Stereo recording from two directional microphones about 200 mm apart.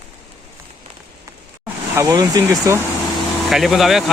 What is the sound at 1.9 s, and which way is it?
Speech, 15° right (ahead or behind).